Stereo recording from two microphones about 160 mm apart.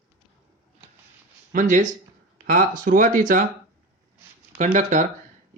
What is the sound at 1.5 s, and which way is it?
Speech, 50° right (ahead or behind).